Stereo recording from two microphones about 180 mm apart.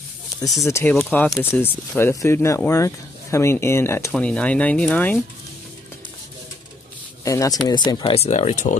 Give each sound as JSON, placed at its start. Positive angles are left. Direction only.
{"t": 0.7, "sound": "speech", "side_deg": 15}
{"t": 7.2, "sound": "speech", "side_deg": 20}